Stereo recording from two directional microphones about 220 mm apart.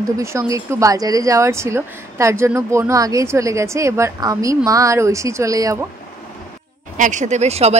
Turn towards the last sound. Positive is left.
turn(degrees=-30)  # may be behind; listen again after turning